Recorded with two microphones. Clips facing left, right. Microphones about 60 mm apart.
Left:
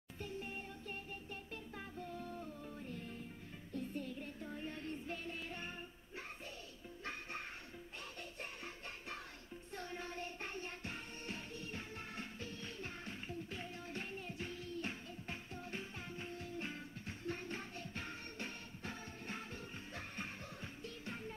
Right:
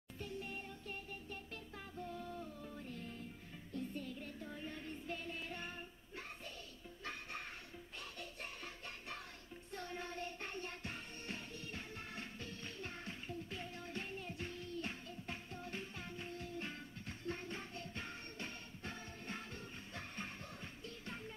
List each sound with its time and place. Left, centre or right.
0.2 s music: left
3.7 s music: left
9.7 s music: left
12.4 s music: right
13.0 s music: left